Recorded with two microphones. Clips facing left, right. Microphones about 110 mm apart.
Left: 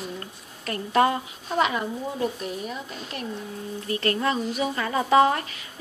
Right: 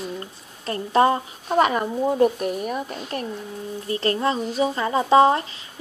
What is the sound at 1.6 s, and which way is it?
Speech, 45° right (ahead or behind).